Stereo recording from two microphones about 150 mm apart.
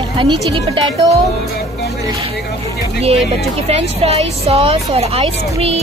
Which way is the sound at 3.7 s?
45° right (ahead or behind).